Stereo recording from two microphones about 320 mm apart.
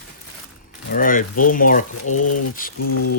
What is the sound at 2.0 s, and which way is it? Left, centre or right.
Speech, left.